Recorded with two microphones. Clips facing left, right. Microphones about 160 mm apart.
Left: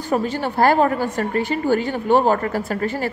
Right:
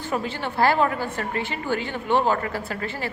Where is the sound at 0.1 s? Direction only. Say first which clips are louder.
Left 7 dB; 40° left (ahead or behind).